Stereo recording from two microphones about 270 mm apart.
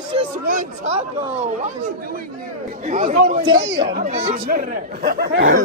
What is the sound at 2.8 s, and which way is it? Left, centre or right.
Speech, right.